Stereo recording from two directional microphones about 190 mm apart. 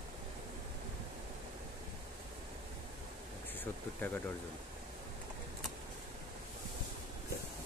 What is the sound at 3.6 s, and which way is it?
Speech, 10° left (ahead or behind).